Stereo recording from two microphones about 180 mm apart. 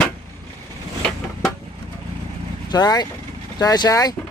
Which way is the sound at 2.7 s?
20° left (ahead or behind).